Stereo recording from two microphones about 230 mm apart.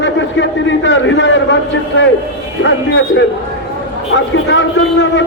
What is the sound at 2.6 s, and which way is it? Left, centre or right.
A man's voice, left.